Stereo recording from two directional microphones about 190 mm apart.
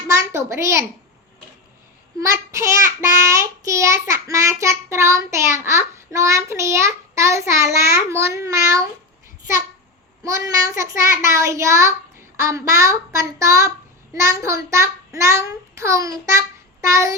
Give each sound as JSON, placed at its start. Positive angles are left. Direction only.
{"t": 0.1, "sound": "a sound", "side_deg": -15}
{"t": 2.2, "sound": "child singing", "side_deg": -15}
{"t": 10.2, "sound": "child singing", "side_deg": -15}